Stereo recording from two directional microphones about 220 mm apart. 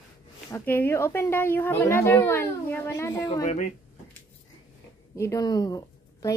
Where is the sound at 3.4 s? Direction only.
35° left (ahead or behind).